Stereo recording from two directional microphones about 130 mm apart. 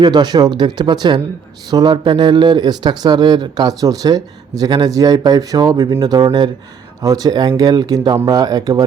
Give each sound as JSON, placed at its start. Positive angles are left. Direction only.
{"t": 0.0, "sound": "speech", "side_deg": -35}